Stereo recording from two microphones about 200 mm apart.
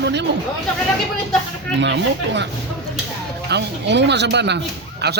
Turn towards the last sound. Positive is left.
turn(degrees=-55)  # may be behind; listen again after turning